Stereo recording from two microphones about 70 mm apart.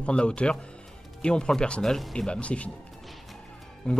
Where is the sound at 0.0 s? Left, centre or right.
Centre.